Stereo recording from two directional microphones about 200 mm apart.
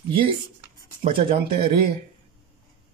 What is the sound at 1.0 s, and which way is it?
Speech, 30° right (ahead or behind).